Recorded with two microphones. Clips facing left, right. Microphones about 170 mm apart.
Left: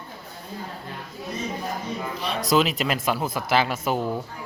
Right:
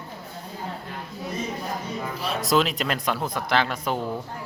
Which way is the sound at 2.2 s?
Centre (ahead or behind).